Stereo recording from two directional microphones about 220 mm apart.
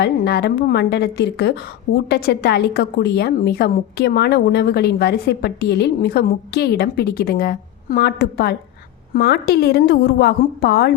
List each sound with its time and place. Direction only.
0.0 s a woman's voice: 45° left (ahead or behind)